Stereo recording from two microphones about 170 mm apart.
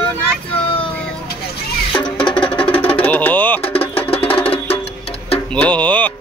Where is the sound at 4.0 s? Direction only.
35° left (ahead or behind).